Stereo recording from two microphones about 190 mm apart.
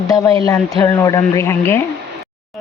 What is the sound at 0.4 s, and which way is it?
Speech, 20° left (ahead or behind).